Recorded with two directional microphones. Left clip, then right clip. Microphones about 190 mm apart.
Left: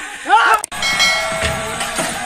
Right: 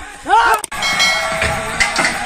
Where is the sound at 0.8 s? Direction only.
Centre (ahead or behind).